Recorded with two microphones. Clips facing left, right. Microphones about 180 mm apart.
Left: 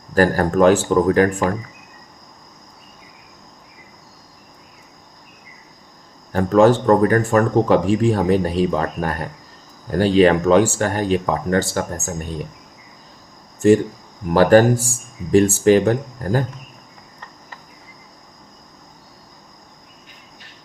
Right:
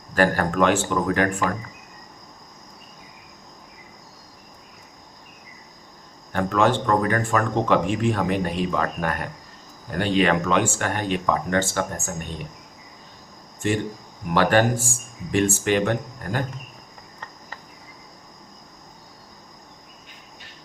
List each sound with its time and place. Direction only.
0.1 s speech: 40° left (ahead or behind)
6.3 s speech: 35° left (ahead or behind)
14.3 s speech: 40° left (ahead or behind)